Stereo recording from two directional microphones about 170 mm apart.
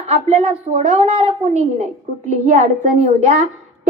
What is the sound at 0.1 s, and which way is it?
A woman's voice, 40° right (ahead or behind).